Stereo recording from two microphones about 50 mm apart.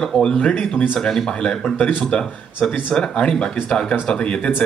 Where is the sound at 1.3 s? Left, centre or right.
Centre.